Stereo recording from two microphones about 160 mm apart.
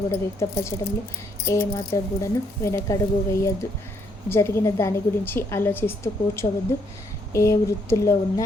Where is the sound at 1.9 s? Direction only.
20° left (ahead or behind).